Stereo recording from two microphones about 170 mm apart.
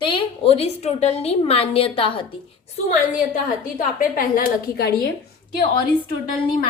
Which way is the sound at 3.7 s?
55° left (ahead or behind).